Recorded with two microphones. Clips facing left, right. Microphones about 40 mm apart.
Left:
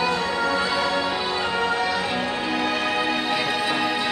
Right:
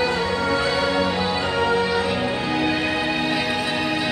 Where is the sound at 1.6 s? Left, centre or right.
Centre.